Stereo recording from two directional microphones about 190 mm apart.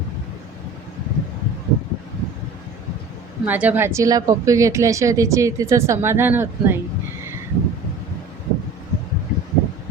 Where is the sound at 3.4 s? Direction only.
10° right (ahead or behind).